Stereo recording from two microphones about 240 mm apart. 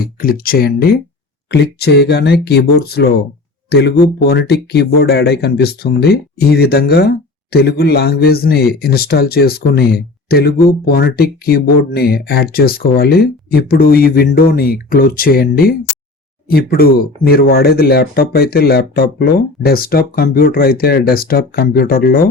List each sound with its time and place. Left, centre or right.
0.0 s speech: left